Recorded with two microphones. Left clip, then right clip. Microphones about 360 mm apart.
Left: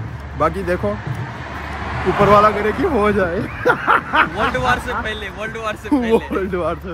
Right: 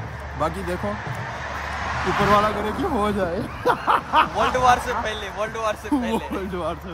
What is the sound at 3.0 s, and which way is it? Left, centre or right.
Speech, centre.